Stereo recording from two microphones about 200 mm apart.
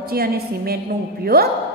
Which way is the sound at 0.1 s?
50° right (ahead or behind).